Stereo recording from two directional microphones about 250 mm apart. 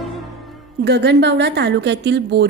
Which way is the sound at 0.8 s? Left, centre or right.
Right.